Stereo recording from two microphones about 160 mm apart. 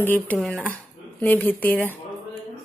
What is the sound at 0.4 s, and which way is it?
Speech, centre (ahead or behind).